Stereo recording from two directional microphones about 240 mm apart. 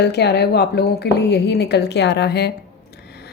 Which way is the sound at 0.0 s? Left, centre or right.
Left.